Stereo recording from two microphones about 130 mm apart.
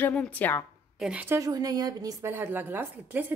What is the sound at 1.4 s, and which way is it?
Speech, 30° right (ahead or behind).